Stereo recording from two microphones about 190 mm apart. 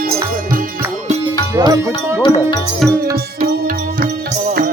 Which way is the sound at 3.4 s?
45° right (ahead or behind).